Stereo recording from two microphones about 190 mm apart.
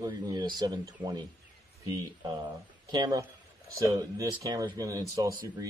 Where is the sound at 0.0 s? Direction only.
20° right (ahead or behind).